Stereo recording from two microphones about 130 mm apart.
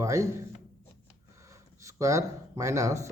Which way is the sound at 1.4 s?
25° right (ahead or behind).